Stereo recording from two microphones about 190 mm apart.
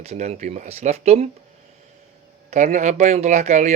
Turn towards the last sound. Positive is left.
turn(degrees=-35)  # may be behind; listen again after turning